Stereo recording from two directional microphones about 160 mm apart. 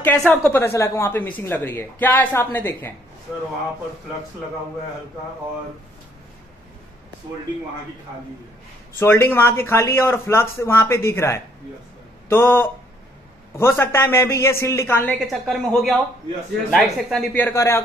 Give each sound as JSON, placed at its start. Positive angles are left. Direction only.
{"t": 0.0, "sound": "a woman's voice", "side_deg": 5}
{"t": 8.9, "sound": "a woman's voice", "side_deg": 15}
{"t": 15.1, "sound": "a woman's voice", "side_deg": 0}